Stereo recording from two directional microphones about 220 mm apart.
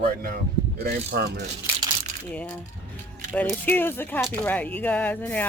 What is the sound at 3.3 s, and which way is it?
Speech, 5° left (ahead or behind).